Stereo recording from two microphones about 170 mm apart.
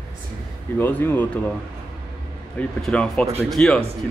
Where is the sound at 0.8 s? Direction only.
10° left (ahead or behind).